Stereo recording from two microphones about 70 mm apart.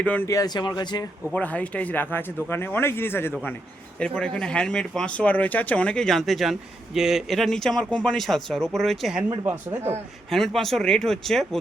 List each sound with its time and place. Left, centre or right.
0.0 s speech: left
0.4 s speech: left
1.3 s speech: left
4.0 s speech: centre
6.1 s speech: centre
10.2 s speech: centre